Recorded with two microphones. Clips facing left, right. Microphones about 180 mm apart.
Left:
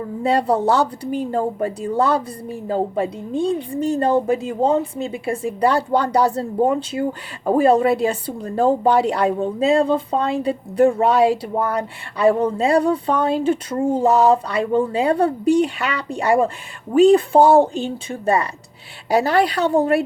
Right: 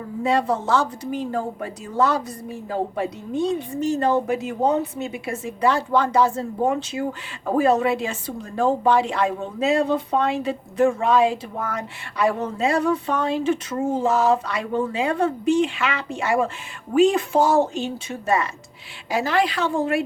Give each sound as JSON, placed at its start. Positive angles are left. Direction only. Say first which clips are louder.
{"t": 0.2, "sound": "speech", "louder": "left 3 dB", "side_deg": 35}
{"t": 17.4, "sound": "speech", "louder": "left 4 dB", "side_deg": 55}
{"t": 18.1, "sound": "speech", "louder": "left 3 dB", "side_deg": 30}